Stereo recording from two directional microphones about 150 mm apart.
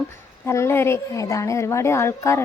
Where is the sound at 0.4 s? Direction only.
20° left (ahead or behind).